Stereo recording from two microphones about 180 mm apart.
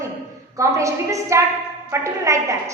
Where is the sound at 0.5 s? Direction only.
15° right (ahead or behind).